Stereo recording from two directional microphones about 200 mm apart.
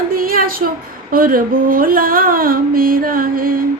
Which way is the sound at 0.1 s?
45° right (ahead or behind).